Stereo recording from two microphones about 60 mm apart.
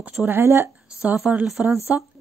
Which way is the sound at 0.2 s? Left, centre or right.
Right.